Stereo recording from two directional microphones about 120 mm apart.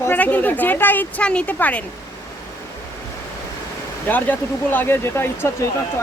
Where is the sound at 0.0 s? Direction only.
15° left (ahead or behind).